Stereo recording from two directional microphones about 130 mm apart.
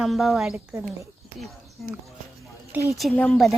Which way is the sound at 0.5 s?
15° right (ahead or behind).